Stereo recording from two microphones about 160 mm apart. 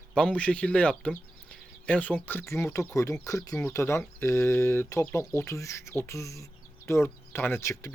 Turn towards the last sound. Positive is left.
turn(degrees=15)  # may be behind; listen again after turning